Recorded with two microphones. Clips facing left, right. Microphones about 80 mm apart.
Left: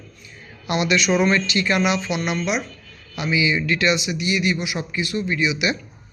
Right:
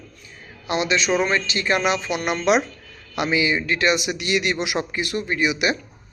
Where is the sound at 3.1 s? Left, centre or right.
Right.